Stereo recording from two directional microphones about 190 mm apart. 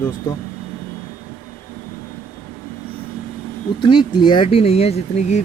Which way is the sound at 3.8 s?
25° left (ahead or behind).